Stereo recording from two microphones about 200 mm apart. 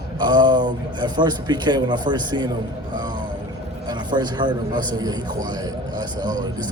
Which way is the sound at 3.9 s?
20° right (ahead or behind).